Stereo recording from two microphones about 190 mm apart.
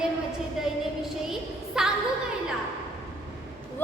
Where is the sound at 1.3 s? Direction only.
5° right (ahead or behind).